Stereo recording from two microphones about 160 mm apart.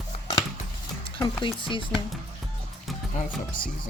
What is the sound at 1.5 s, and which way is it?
Speech, 30° left (ahead or behind).